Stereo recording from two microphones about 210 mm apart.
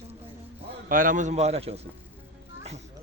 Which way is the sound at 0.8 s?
40° right (ahead or behind).